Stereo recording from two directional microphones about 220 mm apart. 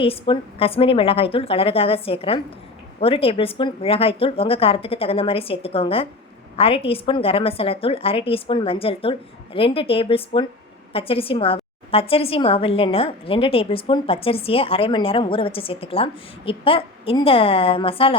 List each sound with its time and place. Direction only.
0.0 s a woman's voice: 25° left (ahead or behind)